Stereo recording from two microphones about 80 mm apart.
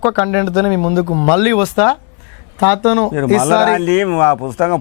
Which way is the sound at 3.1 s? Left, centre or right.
Centre.